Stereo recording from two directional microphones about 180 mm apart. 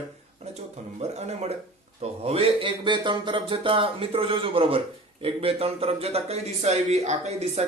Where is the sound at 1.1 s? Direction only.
35° right (ahead or behind).